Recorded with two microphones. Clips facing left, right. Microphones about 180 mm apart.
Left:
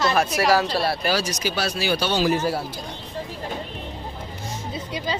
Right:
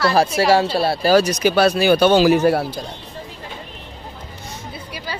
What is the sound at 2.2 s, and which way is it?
Speech, 70° right (ahead or behind).